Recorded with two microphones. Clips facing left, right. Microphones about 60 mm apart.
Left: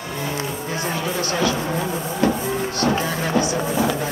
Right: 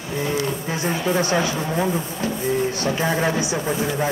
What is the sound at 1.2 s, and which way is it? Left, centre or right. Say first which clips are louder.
Speech: left 1 dB; centre.